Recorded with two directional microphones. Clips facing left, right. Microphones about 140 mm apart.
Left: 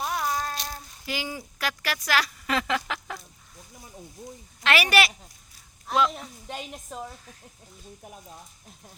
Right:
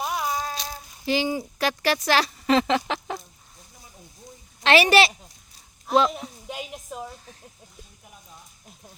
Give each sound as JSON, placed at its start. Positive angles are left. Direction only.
{"t": 0.0, "sound": "a sound", "side_deg": -10}
{"t": 1.0, "sound": "speech", "side_deg": -30}
{"t": 4.6, "sound": "speech", "side_deg": -30}
{"t": 6.1, "sound": "speech", "side_deg": -5}